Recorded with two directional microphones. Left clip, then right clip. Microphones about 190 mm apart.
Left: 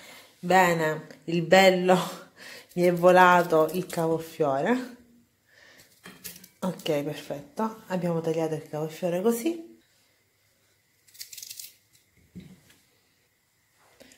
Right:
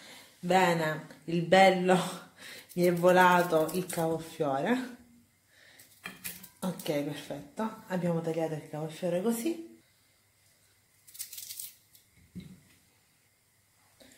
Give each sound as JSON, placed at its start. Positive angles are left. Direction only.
{"t": 0.5, "sound": "speech", "side_deg": 25}
{"t": 6.6, "sound": "speech", "side_deg": 20}